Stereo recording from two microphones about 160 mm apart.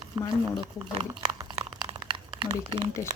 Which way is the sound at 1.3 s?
30° right (ahead or behind).